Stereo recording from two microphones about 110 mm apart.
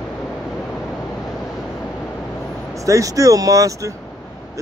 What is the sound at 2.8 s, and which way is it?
Speech, 30° right (ahead or behind).